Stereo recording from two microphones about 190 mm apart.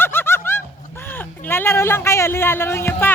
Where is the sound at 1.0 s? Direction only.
10° left (ahead or behind).